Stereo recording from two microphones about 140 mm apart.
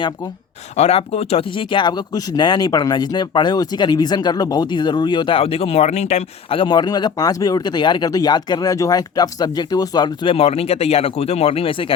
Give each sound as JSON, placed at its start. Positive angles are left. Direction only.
{"t": 0.8, "sound": "speech", "side_deg": 45}
{"t": 6.6, "sound": "speech", "side_deg": 30}